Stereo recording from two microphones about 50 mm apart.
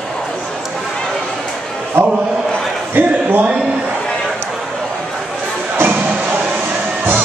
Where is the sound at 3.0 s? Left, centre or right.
Right.